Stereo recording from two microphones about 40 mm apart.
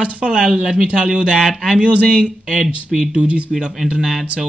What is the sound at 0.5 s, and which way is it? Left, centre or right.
Speech, centre.